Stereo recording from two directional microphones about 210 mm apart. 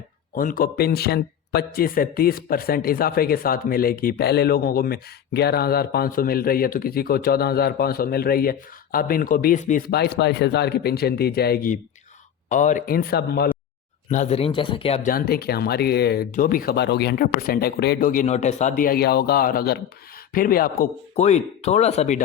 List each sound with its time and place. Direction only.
0.3 s speech: 40° left (ahead or behind)
14.1 s speech: 35° left (ahead or behind)
15.1 s speech: 45° left (ahead or behind)
21.2 s speech: 30° left (ahead or behind)